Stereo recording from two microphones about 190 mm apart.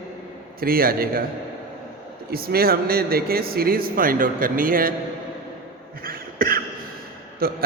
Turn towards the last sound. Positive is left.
turn(degrees=-50)  # may be behind; listen again after turning